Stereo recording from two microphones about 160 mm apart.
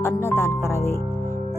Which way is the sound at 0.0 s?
15° left (ahead or behind).